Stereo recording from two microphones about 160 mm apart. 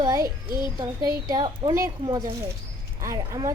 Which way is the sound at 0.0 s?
20° right (ahead or behind).